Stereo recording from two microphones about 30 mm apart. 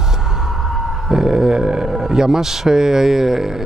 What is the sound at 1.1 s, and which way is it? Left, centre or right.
Speech, right.